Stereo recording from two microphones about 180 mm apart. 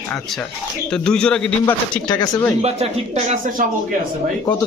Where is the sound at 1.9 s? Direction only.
25° left (ahead or behind).